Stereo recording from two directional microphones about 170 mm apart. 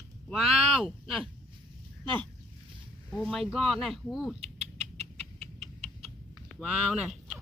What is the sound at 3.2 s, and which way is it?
Speech, centre (ahead or behind).